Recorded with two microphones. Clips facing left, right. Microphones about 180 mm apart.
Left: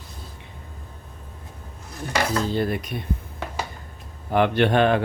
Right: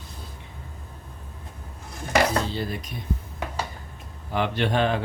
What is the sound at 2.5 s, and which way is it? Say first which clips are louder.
Speech: left 6 dB; 55° left (ahead or behind).